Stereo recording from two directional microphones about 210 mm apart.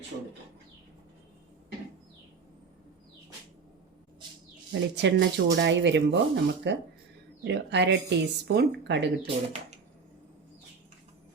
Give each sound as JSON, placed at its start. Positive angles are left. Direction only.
{"t": 4.7, "sound": "speech", "side_deg": -55}